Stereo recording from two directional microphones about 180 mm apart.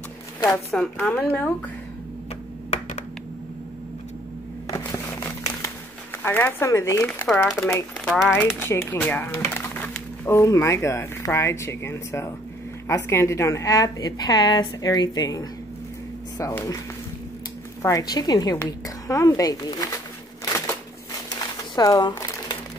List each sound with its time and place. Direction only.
0.4 s a woman's voice: 20° left (ahead or behind)
0.7 s a woman's voice: 5° left (ahead or behind)
2.7 s a sound: 40° left (ahead or behind)
4.6 s crumpling: 15° left (ahead or behind)
6.1 s speech: 10° left (ahead or behind)
7.4 s a woman's voice: centre (ahead or behind)
8.5 s a woman's voice: 15° left (ahead or behind)
17.8 s a woman's voice: 20° left (ahead or behind)
21.4 s crumpling: 20° left (ahead or behind)